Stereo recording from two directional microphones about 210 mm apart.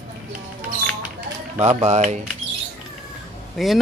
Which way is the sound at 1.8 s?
35° right (ahead or behind).